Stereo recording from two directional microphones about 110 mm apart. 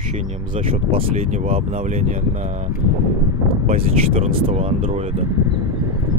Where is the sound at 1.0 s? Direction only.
75° right (ahead or behind).